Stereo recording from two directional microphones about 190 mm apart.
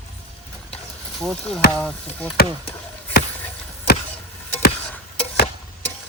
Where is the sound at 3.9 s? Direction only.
55° left (ahead or behind).